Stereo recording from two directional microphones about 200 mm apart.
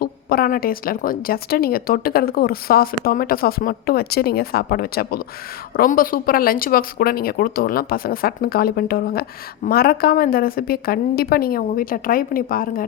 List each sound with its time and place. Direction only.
0.0 s a woman's voice: 45° left (ahead or behind)